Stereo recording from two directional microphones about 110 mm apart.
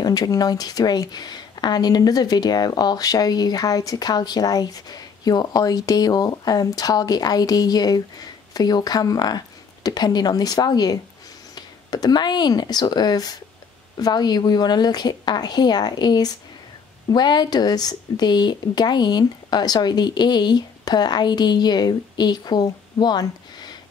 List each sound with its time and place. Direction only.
0.0 s speech: 35° left (ahead or behind)